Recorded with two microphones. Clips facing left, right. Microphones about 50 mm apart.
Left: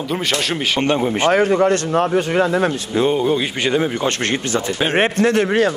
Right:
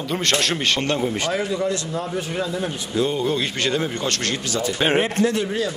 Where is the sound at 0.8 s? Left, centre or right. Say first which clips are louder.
Left 5 dB; left.